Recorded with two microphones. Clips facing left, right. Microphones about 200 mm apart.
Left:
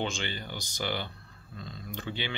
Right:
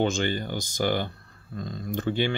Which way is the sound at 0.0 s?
45° right (ahead or behind).